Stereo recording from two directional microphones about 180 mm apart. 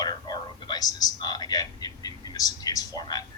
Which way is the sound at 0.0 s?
25° left (ahead or behind).